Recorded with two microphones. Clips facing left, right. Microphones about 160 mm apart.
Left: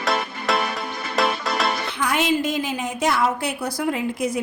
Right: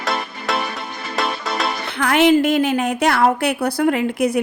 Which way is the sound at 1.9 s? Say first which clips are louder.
Right 10 dB; 65° right (ahead or behind).